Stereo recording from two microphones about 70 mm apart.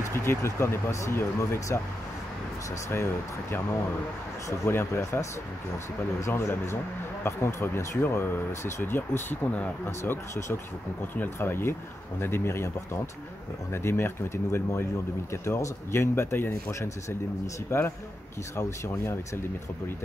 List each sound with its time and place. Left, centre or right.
0.1 s speech: left
4.6 s speech: left
6.2 s speech: left
13.8 s speech: left